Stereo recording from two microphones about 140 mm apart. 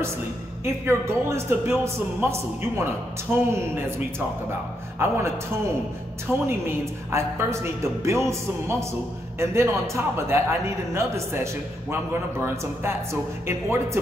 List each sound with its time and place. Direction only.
0.7 s a woman's voice: 20° right (ahead or behind)
4.9 s a woman's voice: 20° right (ahead or behind)